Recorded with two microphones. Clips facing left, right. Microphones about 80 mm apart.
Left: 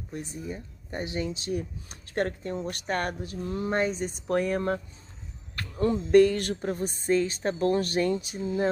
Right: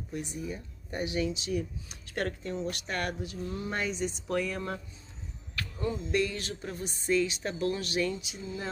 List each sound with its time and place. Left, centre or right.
0.1 s speech: left
5.6 s speech: left